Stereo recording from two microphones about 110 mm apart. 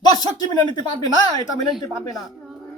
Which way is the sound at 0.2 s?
40° left (ahead or behind).